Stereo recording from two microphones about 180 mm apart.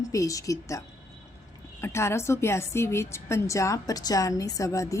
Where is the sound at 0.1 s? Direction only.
20° left (ahead or behind).